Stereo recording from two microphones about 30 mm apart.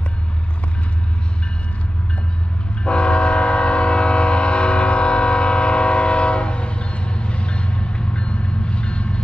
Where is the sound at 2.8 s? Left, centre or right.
Left.